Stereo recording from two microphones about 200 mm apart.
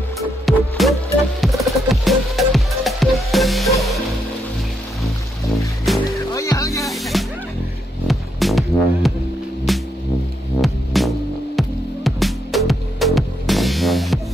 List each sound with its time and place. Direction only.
0.5 s music: centre (ahead or behind)
5.9 s music: centre (ahead or behind)
6.3 s music: 15° left (ahead or behind)
6.9 s music: centre (ahead or behind)